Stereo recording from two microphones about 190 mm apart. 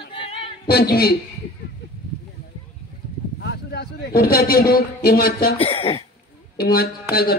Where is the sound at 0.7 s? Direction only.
55° left (ahead or behind).